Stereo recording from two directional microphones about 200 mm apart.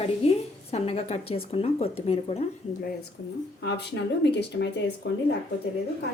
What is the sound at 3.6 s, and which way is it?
Speech, 60° left (ahead or behind).